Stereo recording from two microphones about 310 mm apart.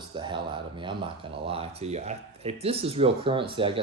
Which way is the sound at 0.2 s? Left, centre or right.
Centre.